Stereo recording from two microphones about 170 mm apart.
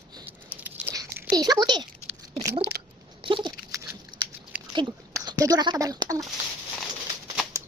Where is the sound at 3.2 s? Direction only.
30° right (ahead or behind).